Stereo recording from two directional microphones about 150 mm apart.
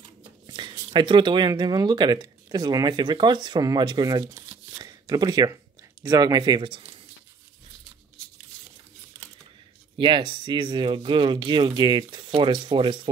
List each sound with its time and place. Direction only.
0.5 s speech: 30° right (ahead or behind)
4.7 s a sound: 25° right (ahead or behind)
6.0 s speech: 25° right (ahead or behind)
9.9 s speech: 35° right (ahead or behind)